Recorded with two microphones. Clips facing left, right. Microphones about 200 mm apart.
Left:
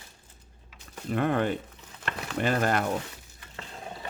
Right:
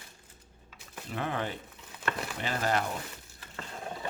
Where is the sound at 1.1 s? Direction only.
55° left (ahead or behind).